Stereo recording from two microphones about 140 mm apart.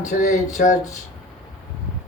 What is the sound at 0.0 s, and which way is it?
Speech, 60° left (ahead or behind).